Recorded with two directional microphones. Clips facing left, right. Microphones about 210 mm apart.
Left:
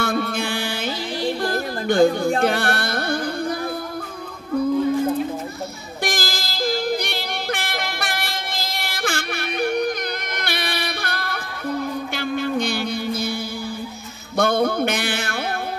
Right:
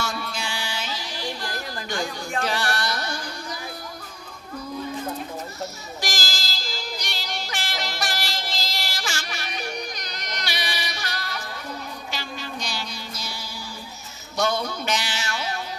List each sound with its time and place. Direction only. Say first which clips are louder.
0.0 s music: left 8 dB; 55° left (ahead or behind)
2.4 s carnatic music: left 6 dB; 55° left (ahead or behind)
6.0 s yodeling: left 7 dB; 55° left (ahead or behind)
10.3 s music: left 5 dB; 55° left (ahead or behind)
14.3 s music: left 7 dB; 55° left (ahead or behind)